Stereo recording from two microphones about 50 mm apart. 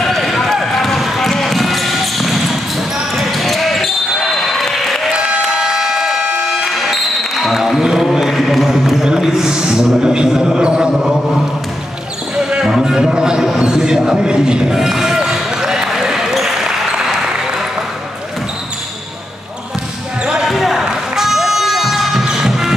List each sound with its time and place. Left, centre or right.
0.0 s basketball bounce: centre
5.1 s applause: right
5.4 s a sound: centre
6.5 s music: centre
9.0 s a sound: centre
12.4 s basketball bounce: centre
13.7 s a sound: centre
20.4 s basketball bounce: centre
20.8 s music: centre